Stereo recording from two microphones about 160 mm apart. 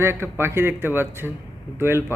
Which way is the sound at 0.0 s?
15° right (ahead or behind).